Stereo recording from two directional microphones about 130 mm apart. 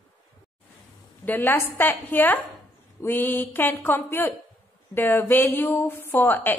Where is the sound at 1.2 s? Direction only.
15° left (ahead or behind).